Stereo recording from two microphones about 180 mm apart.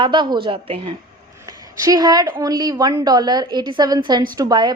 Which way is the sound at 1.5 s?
20° right (ahead or behind).